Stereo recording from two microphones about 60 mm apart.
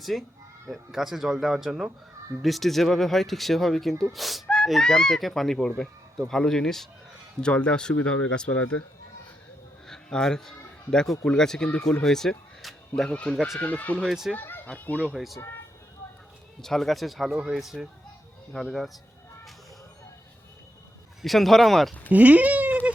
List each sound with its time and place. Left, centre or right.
0.0 s speech: centre
2.4 s speech: centre
4.4 s gasp: centre
4.8 s speech: centre
9.8 s a sound: centre
10.9 s speech: centre
13.1 s speech: left
14.1 s speech: centre
14.3 s speech: left
16.6 s speech: centre
21.2 s speech: centre
22.1 s speech: right